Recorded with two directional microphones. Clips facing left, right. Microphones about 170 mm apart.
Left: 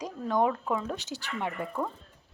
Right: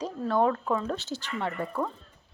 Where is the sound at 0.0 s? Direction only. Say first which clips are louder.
Right 2 dB; 15° left (ahead or behind).